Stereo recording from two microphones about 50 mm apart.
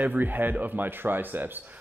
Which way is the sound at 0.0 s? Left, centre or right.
Right.